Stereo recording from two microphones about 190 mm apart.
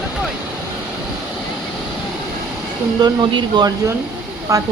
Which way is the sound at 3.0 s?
20° right (ahead or behind).